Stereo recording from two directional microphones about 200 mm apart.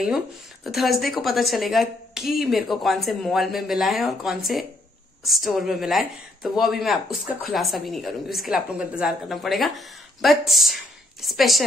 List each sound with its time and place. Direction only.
0.7 s a woman's voice: centre (ahead or behind)